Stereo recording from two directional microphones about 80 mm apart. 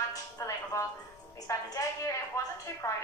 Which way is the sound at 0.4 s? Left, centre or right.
Left.